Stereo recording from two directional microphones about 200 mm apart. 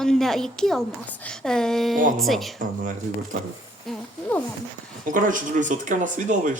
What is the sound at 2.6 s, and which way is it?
Speech, 40° right (ahead or behind).